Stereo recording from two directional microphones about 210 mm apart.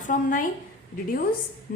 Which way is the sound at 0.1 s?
40° left (ahead or behind).